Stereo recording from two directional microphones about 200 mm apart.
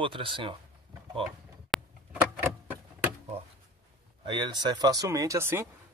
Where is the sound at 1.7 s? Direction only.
5° right (ahead or behind).